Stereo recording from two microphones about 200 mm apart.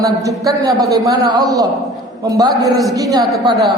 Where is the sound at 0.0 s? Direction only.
15° right (ahead or behind).